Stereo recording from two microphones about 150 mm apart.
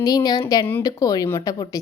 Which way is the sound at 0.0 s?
25° left (ahead or behind).